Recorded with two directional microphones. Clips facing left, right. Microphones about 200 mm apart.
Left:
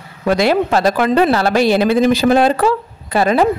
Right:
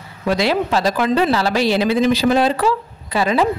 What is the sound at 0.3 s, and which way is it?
A woman's voice, 50° left (ahead or behind).